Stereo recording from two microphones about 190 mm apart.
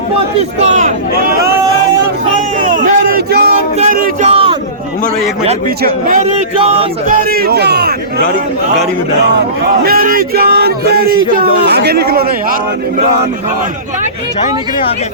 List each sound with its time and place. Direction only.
0.6 s speech: 40° right (ahead or behind)
2.6 s a sound: 45° right (ahead or behind)
3.8 s music: 45° right (ahead or behind)
4.3 s a sound: 30° right (ahead or behind)
5.6 s speech: 45° right (ahead or behind)
7.1 s a man's voice: 55° right (ahead or behind)
9.2 s a man's voice: 55° right (ahead or behind)